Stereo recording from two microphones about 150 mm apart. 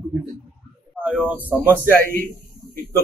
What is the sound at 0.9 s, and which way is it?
Speech, 10° right (ahead or behind).